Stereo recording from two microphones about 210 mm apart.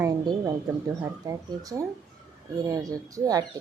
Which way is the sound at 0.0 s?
15° right (ahead or behind).